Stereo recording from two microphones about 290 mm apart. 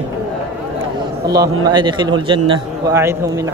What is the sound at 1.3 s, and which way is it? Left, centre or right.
A man's voice, centre.